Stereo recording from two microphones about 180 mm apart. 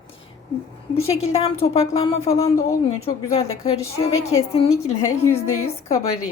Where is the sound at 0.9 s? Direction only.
35° left (ahead or behind).